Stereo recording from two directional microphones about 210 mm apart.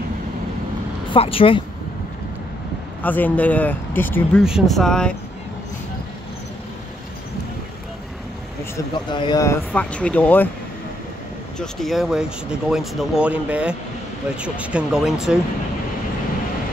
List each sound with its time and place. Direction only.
1.1 s speech: 25° left (ahead or behind)
3.0 s speech: 10° left (ahead or behind)
4.4 s speech: centre (ahead or behind)
9.1 s speech: 20° left (ahead or behind)
11.5 s speech: centre (ahead or behind)